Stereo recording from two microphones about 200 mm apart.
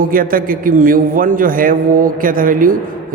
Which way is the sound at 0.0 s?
45° right (ahead or behind).